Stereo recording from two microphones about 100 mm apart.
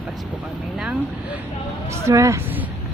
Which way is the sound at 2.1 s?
30° right (ahead or behind).